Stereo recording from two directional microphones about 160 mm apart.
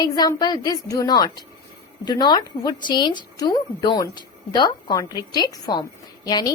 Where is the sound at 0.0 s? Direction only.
25° left (ahead or behind).